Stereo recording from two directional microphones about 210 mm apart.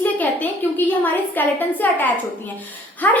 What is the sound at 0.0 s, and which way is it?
A woman's voice, 10° left (ahead or behind).